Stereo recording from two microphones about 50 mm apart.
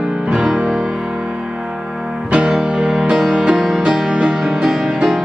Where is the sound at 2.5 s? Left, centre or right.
Centre.